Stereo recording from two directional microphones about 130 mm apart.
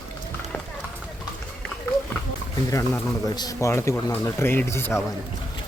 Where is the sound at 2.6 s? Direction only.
25° left (ahead or behind).